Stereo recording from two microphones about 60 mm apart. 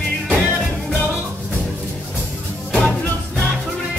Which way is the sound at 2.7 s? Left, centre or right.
Centre.